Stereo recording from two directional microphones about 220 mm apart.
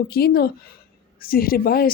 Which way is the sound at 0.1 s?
45° left (ahead or behind).